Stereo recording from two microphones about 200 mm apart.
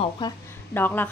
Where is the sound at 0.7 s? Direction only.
10° left (ahead or behind).